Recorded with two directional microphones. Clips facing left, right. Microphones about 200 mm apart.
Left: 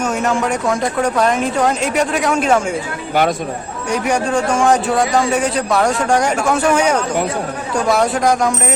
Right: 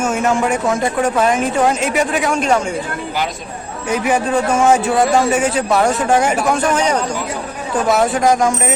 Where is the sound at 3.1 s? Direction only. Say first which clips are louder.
Left 9 dB; 55° left (ahead or behind).